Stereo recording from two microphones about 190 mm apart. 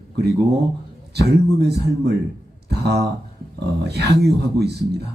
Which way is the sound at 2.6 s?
60° right (ahead or behind).